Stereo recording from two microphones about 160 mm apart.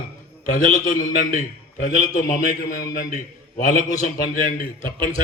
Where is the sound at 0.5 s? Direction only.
60° left (ahead or behind).